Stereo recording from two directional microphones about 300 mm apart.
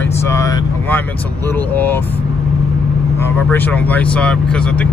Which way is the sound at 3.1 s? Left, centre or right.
Centre.